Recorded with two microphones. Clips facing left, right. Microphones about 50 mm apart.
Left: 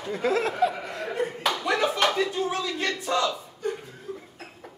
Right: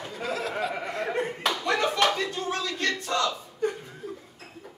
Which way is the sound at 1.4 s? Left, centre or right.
Centre.